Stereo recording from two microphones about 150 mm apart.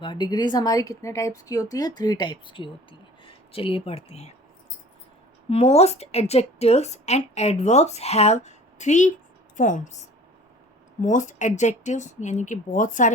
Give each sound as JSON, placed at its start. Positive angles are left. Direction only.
{"t": 0.0, "sound": "a woman's voice", "side_deg": 30}
{"t": 5.5, "sound": "a woman's voice", "side_deg": 45}
{"t": 11.0, "sound": "speech", "side_deg": 55}